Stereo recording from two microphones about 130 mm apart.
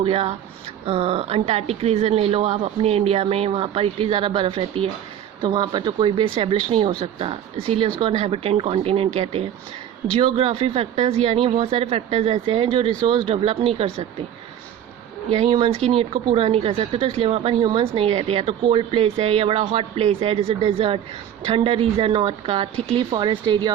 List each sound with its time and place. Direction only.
0.0 s a woman's voice: 50° right (ahead or behind)
7.0 s a woman's voice: 50° right (ahead or behind)
10.2 s a woman's voice: 45° right (ahead or behind)
11.3 s a woman's voice: 45° right (ahead or behind)
15.4 s a woman's voice: 35° right (ahead or behind)
17.6 s a woman's voice: 35° right (ahead or behind); by 22.7 s 50° right (ahead or behind)
22.9 s speech: 40° right (ahead or behind)